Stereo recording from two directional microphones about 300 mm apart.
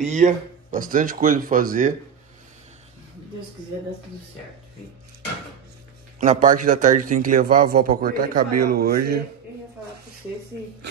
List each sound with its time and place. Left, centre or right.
0.0 s a man's voice: right
6.1 s a man's voice: right